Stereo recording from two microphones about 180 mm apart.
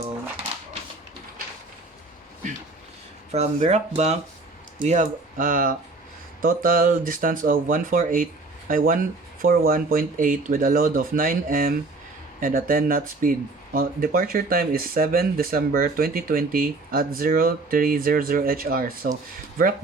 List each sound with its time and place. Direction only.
3.3 s speech: 40° right (ahead or behind); by 19.1 s 55° right (ahead or behind)